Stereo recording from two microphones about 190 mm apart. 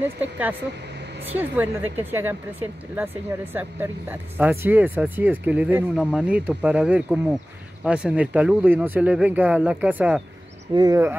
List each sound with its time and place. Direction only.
0.0 s speech: 10° right (ahead or behind)
10.7 s speech: 20° right (ahead or behind)